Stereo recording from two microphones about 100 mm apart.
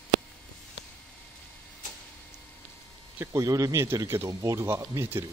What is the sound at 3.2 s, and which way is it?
Speech, 30° right (ahead or behind).